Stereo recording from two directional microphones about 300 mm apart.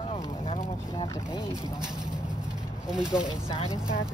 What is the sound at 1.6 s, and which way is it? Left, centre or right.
Speech, centre.